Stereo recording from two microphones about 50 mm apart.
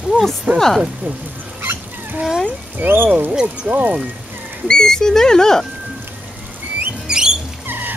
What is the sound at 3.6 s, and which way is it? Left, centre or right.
Speech, right.